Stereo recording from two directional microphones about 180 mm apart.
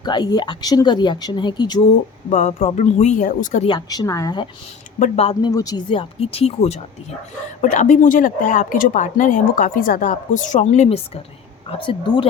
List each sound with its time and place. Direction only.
0.0 s speech: 25° left (ahead or behind)
2.3 s speech: 40° left (ahead or behind)
3.7 s speech: 20° left (ahead or behind)
4.9 s speech: 40° left (ahead or behind)
5.4 s a woman's voice: 20° left (ahead or behind)